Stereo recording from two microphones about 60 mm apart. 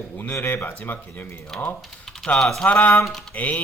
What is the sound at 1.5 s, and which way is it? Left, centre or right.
Speech, centre.